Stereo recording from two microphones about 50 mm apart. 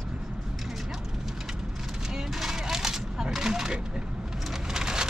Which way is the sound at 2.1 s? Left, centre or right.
Centre.